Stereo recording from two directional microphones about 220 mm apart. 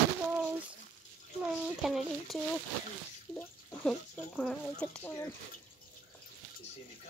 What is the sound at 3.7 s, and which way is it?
Speech, centre (ahead or behind).